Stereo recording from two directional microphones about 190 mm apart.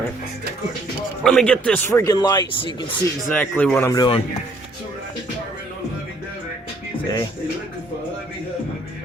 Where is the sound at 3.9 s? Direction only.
25° left (ahead or behind).